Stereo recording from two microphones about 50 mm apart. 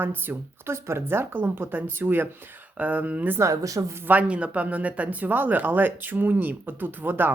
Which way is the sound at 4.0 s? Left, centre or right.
Right.